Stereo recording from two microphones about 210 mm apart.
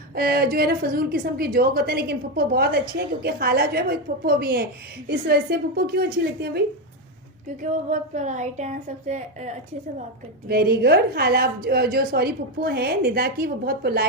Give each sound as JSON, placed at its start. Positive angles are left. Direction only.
{"t": 0.2, "sound": "a woman's voice", "side_deg": -45}
{"t": 7.6, "sound": "a woman's voice", "side_deg": -35}
{"t": 10.5, "sound": "a woman's voice", "side_deg": -50}